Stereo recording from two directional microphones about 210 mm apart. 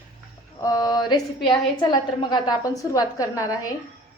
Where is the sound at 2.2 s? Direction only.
20° left (ahead or behind).